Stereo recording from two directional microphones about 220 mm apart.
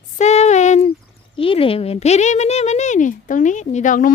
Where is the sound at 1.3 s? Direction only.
25° left (ahead or behind).